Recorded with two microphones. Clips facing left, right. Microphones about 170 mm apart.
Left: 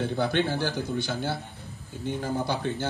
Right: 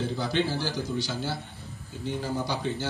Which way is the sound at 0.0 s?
60° left (ahead or behind).